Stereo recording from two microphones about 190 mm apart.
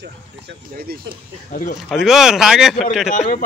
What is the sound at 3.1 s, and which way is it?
Speech, 40° left (ahead or behind).